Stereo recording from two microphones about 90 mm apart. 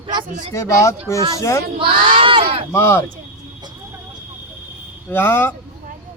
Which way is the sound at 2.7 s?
30° left (ahead or behind).